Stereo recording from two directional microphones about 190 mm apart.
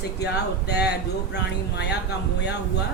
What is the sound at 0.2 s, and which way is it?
Speech, 60° left (ahead or behind).